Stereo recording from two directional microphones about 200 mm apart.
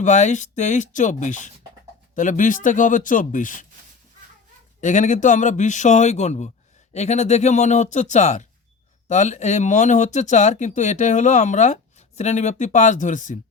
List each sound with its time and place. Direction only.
0.0 s speech: 35° left (ahead or behind)
4.8 s speech: 35° left (ahead or behind)